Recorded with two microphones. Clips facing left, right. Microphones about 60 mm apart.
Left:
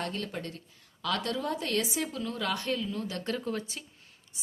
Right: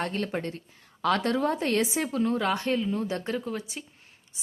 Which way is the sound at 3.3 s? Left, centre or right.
Centre.